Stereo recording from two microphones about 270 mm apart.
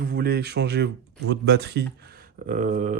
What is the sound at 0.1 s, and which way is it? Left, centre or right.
Speech, right.